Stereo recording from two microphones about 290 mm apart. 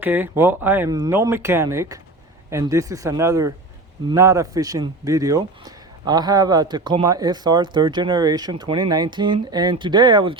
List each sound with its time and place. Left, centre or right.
0.0 s a man's voice: centre